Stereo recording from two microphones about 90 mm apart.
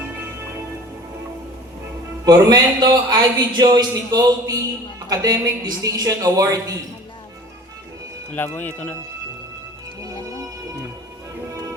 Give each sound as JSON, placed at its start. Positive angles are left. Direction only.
{"t": 2.2, "sound": "speech", "side_deg": -45}
{"t": 8.3, "sound": "speech", "side_deg": 20}